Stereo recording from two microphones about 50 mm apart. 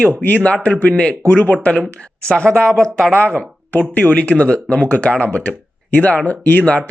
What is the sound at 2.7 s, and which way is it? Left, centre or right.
Speech, centre.